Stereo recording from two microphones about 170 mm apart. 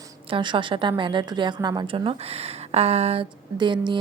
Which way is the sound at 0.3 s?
30° right (ahead or behind).